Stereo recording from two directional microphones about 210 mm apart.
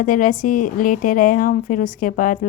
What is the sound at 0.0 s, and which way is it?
Speech, 40° left (ahead or behind).